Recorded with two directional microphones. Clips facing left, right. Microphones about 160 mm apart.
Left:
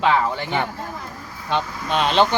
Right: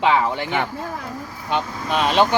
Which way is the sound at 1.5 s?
5° right (ahead or behind).